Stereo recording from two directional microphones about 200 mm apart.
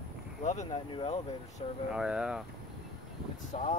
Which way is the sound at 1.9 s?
5° right (ahead or behind).